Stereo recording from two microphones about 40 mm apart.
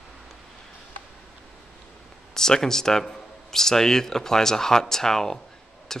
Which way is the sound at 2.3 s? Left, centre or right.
Centre.